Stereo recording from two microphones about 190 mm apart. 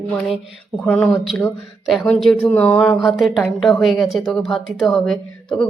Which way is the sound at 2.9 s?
Centre (ahead or behind).